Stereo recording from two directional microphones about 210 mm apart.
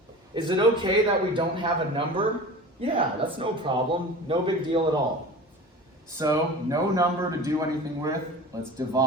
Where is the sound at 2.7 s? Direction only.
25° right (ahead or behind).